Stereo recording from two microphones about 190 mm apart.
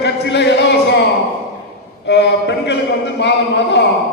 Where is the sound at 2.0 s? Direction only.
65° left (ahead or behind).